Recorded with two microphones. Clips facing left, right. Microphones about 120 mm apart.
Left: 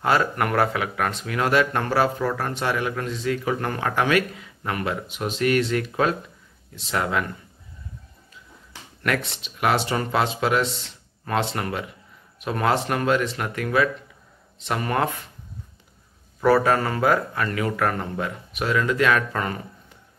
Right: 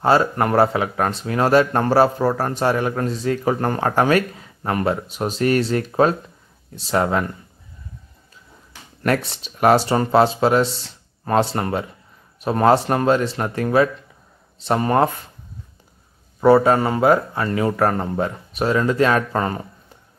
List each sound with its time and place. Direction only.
0.0 s speech: 30° right (ahead or behind)
9.0 s speech: 35° right (ahead or behind)
16.3 s speech: 25° right (ahead or behind)